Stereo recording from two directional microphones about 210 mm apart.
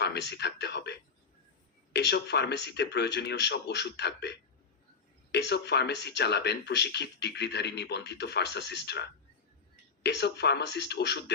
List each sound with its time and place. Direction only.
0.0 s speech: 50° left (ahead or behind)